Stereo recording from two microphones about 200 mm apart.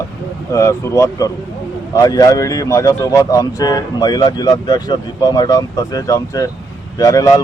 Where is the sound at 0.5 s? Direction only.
15° left (ahead or behind).